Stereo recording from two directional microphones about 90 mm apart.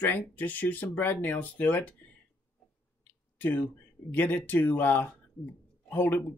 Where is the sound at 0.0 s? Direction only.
20° left (ahead or behind).